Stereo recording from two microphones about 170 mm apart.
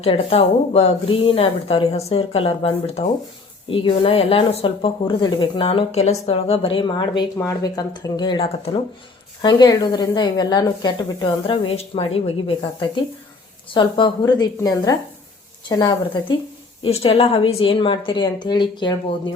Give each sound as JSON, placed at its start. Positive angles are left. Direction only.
{"t": 0.0, "sound": "speech", "side_deg": 35}
{"t": 16.8, "sound": "speech", "side_deg": 35}